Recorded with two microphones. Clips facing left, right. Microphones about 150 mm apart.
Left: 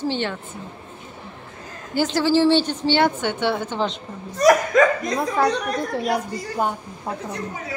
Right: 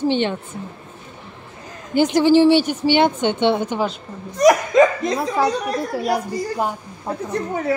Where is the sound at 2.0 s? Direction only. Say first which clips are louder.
Right 5 dB; 20° right (ahead or behind).